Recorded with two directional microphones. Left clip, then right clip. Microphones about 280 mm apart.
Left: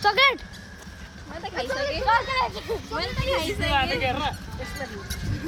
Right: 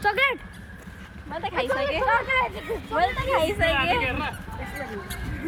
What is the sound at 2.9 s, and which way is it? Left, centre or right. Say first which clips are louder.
Speech: right 5 dB; centre.